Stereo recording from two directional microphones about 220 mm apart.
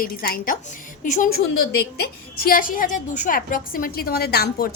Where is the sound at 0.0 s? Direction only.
40° left (ahead or behind).